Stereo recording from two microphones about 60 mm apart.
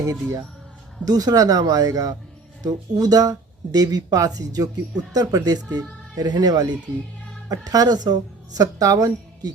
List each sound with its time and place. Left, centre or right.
0.0 s speech: right
1.0 s speech: right
2.6 s speech: right